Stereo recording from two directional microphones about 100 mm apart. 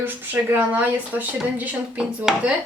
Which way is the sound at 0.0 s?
20° right (ahead or behind).